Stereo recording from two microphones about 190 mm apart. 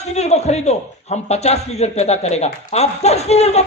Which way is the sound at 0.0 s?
35° left (ahead or behind).